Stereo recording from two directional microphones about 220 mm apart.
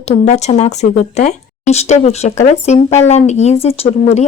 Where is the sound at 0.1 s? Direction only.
30° left (ahead or behind).